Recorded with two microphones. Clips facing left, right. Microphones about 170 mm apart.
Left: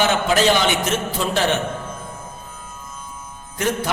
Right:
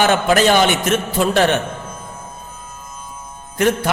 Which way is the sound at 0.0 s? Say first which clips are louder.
Right 3 dB; 55° right (ahead or behind).